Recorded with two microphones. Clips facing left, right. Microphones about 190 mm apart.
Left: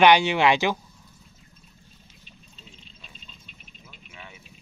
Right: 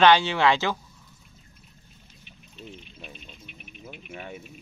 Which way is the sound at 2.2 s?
60° right (ahead or behind).